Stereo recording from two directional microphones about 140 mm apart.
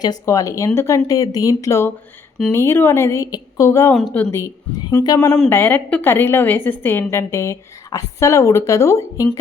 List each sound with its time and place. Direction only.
0.0 s a woman's voice: 25° left (ahead or behind)
3.9 s a woman's voice: 5° left (ahead or behind); by 9.4 s 20° left (ahead or behind)